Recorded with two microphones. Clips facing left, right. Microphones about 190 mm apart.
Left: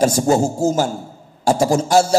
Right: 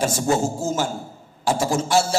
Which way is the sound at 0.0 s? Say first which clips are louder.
Left 6 dB; 40° left (ahead or behind).